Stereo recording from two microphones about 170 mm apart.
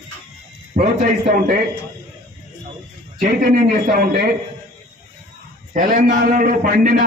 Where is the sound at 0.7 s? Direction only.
45° right (ahead or behind).